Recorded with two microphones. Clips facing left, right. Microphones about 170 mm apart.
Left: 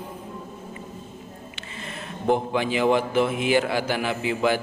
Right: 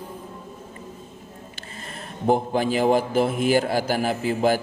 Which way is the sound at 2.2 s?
40° right (ahead or behind).